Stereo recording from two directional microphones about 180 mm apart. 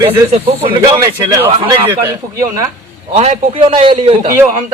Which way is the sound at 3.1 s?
35° right (ahead or behind).